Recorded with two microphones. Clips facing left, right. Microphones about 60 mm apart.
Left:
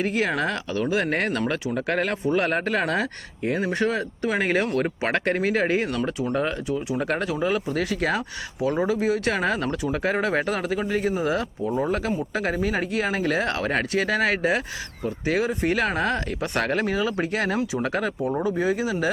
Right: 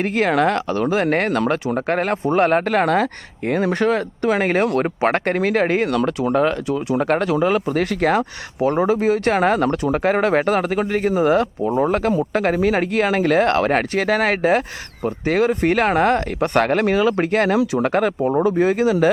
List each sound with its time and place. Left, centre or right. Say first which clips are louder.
0.0 s speech: right 6 dB; right
5.9 s speech: right 7 dB; right
7.0 s speech: right 9 dB; right
17.6 s speech: right 7 dB; right
17.8 s speech: right 7 dB; right